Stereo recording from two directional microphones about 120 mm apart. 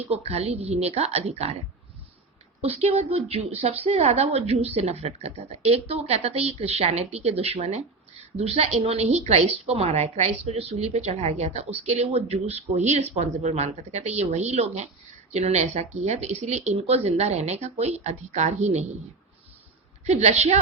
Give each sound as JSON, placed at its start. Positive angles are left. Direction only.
{"t": 0.1, "sound": "a woman's voice", "side_deg": -60}
{"t": 2.6, "sound": "a woman's voice", "side_deg": -55}
{"t": 20.1, "sound": "speech", "side_deg": -70}